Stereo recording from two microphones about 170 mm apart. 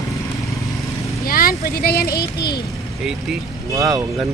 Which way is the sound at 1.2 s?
60° left (ahead or behind).